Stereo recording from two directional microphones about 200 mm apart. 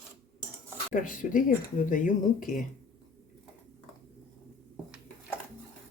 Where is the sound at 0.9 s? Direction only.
40° left (ahead or behind).